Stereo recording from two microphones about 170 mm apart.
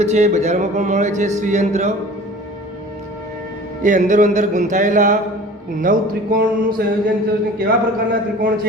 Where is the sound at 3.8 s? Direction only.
45° right (ahead or behind).